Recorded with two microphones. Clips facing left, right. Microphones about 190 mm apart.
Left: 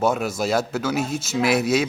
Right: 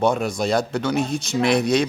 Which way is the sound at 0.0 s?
5° left (ahead or behind).